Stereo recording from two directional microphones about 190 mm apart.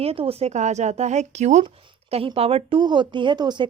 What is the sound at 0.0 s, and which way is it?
A woman's voice, 30° right (ahead or behind).